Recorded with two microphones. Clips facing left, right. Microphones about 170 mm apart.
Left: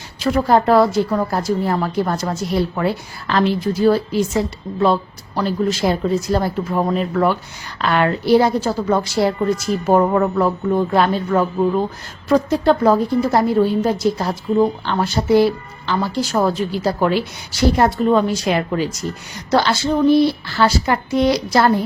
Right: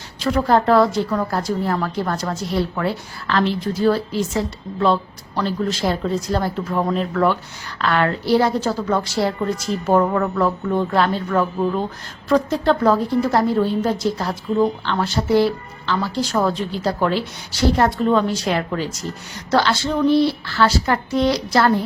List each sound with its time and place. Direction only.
0.3 s a woman's voice: 10° left (ahead or behind)
10.0 s a woman's voice: 25° left (ahead or behind)